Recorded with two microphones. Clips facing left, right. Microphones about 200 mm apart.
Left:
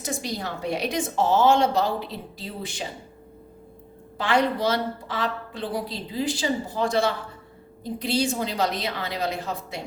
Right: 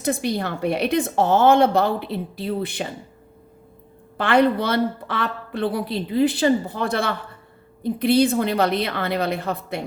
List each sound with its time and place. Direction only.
0.0 s a woman's voice: 60° right (ahead or behind)
4.2 s a woman's voice: 60° right (ahead or behind)